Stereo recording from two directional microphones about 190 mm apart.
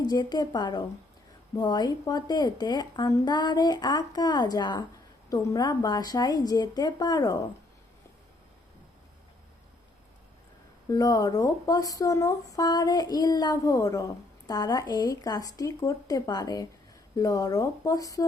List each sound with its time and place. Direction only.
0.0 s a woman's voice: 20° left (ahead or behind)
10.9 s a woman's voice: 20° left (ahead or behind)